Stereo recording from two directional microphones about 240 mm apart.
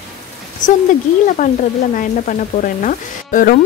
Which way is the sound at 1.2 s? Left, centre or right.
Left.